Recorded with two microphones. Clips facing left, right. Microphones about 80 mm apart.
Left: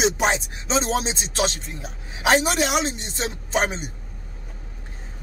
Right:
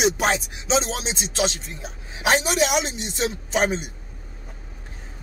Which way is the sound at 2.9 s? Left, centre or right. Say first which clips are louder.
Left 1 dB; centre.